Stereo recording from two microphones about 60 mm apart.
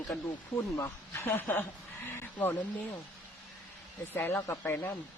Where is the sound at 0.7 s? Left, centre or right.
Left.